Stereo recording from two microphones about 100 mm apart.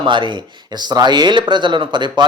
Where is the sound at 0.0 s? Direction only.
55° right (ahead or behind).